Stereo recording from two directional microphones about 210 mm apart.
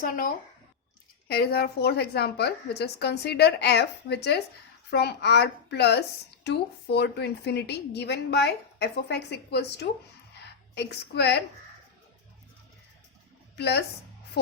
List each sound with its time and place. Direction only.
0.0 s a woman's voice: 40° left (ahead or behind)
13.6 s a woman's voice: 50° left (ahead or behind)